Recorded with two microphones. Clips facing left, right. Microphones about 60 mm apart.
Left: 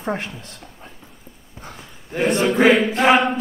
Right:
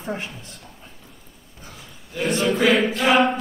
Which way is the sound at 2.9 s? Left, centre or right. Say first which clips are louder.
Left 4 dB; left.